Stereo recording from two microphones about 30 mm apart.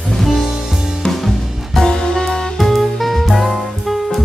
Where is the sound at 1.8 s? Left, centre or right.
Left.